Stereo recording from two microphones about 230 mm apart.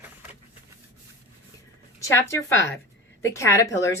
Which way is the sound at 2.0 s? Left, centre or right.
Centre.